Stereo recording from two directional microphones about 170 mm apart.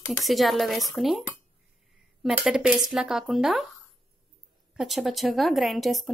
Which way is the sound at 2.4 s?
5° right (ahead or behind).